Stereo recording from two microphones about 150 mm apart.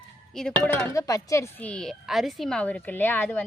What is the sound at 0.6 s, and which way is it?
Speech, 15° left (ahead or behind).